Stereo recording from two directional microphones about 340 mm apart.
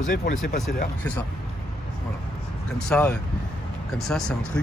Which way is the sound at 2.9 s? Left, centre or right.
Centre.